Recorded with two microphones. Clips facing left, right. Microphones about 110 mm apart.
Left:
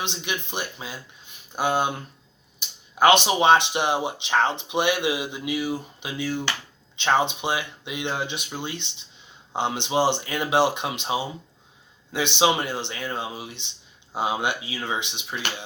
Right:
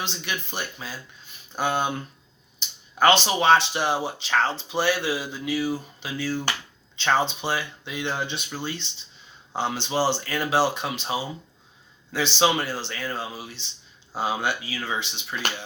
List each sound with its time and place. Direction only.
0.0 s speech: 20° left (ahead or behind)